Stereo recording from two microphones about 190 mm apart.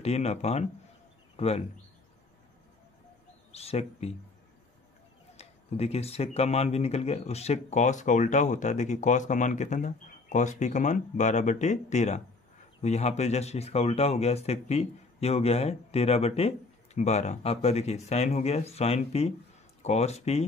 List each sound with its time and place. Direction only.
0.0 s speech: 35° left (ahead or behind)
1.3 s bird: 30° left (ahead or behind)
3.5 s speech: 35° left (ahead or behind)
5.4 s speech: 35° left (ahead or behind)